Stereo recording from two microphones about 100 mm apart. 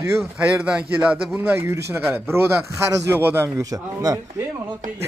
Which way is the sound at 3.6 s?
35° right (ahead or behind).